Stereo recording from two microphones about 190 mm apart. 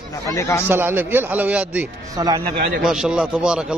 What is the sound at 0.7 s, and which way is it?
A man's voice, 10° right (ahead or behind).